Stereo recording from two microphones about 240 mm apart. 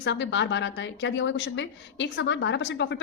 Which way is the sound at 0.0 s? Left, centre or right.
Left.